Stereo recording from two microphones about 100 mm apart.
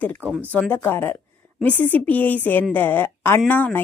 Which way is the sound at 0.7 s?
20° left (ahead or behind).